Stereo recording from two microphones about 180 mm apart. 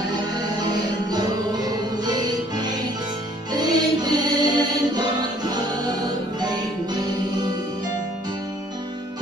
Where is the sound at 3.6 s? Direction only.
20° right (ahead or behind).